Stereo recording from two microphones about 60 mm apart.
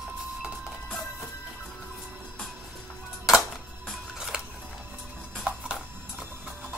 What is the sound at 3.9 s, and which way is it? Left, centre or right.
Music, centre.